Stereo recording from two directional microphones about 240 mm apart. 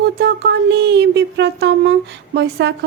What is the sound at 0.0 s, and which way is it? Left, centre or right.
Speech, right.